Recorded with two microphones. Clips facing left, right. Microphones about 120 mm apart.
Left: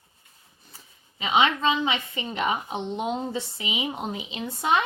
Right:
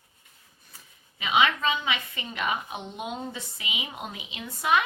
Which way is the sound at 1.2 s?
30° left (ahead or behind).